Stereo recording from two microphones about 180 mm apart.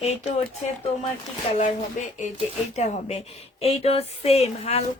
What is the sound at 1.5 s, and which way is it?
A woman's voice, 35° left (ahead or behind).